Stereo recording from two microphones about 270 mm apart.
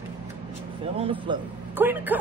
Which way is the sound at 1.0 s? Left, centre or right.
Centre.